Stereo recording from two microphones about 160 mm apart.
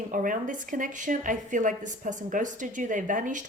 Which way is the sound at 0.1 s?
55° right (ahead or behind).